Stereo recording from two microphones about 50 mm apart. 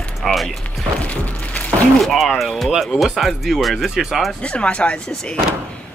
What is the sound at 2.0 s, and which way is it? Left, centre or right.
Speech, centre.